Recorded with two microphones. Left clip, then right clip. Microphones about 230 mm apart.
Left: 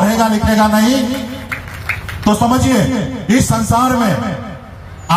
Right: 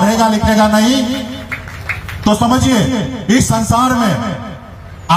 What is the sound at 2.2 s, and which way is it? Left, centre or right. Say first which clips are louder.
A man's voice: right 1 dB; right.